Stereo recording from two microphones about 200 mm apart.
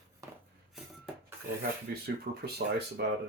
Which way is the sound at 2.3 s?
55° right (ahead or behind).